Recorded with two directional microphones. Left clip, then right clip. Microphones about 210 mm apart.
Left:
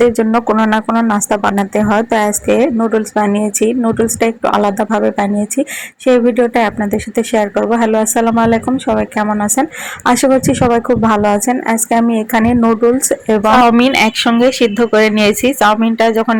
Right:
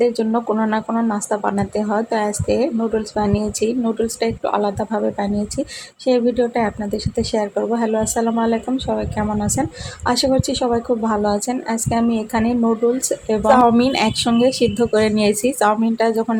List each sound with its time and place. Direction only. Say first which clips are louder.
0.0 s a woman's voice: left 7 dB; 20° left (ahead or behind)